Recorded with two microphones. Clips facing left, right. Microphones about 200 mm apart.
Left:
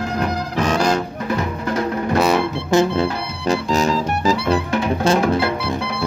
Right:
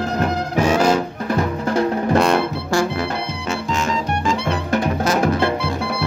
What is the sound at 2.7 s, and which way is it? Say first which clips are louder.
Music: left 4 dB; 25° left (ahead or behind).